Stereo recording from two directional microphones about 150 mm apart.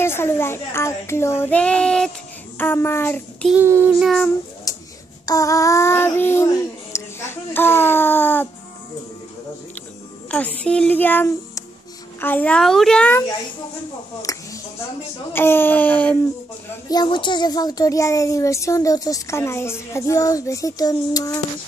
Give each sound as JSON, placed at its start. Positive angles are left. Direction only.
{"t": 0.0, "sound": "child singing", "side_deg": 15}
{"t": 3.5, "sound": "child singing", "side_deg": -15}
{"t": 4.0, "sound": "speech", "side_deg": 0}
{"t": 4.7, "sound": "a sound", "side_deg": 25}
{"t": 5.2, "sound": "child singing", "side_deg": 25}
{"t": 10.3, "sound": "child singing", "side_deg": 10}
{"t": 14.2, "sound": "a sound", "side_deg": 20}
{"t": 15.3, "sound": "child singing", "side_deg": 15}
{"t": 16.9, "sound": "speech", "side_deg": 30}